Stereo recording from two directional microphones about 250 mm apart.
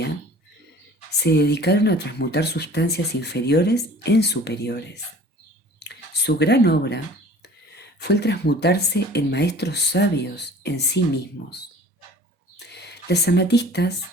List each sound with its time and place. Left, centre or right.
1.2 s speech: left
5.8 s speech: left
8.0 s speech: left
12.5 s a sound: left